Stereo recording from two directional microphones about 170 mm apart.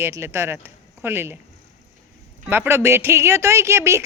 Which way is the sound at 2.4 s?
10° right (ahead or behind).